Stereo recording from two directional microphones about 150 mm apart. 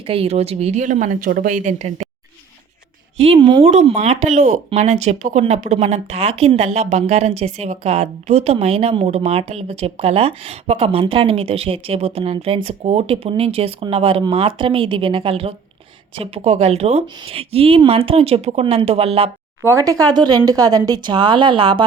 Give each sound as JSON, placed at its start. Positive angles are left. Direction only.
{"t": 0.0, "sound": "speech", "side_deg": -40}
{"t": 3.2, "sound": "speech", "side_deg": -35}
{"t": 3.7, "sound": "speech", "side_deg": -50}
{"t": 19.6, "sound": "speech", "side_deg": -20}